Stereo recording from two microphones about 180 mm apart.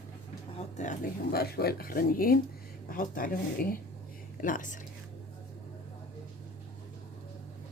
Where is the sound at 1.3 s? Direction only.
60° left (ahead or behind).